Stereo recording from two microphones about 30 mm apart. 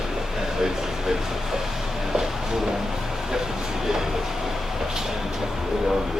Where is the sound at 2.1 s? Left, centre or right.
Centre.